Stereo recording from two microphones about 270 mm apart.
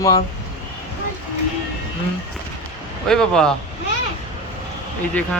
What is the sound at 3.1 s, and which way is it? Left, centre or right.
Speech, centre.